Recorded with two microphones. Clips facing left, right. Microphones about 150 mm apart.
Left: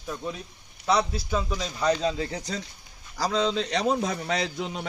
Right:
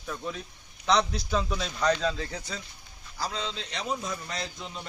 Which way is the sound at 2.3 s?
40° left (ahead or behind).